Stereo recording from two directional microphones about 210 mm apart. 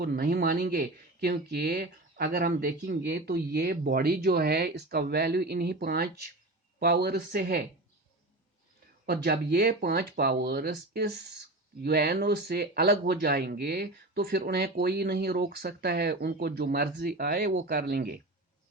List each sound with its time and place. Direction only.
0.0 s speech: 50° right (ahead or behind)
9.0 s speech: 50° right (ahead or behind)